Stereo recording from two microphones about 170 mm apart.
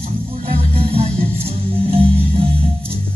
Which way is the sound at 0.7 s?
35° right (ahead or behind).